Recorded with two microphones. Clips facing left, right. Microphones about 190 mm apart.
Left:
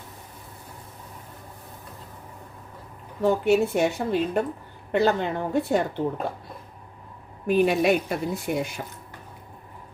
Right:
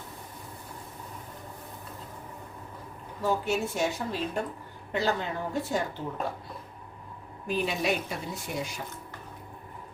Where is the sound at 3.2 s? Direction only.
60° left (ahead or behind).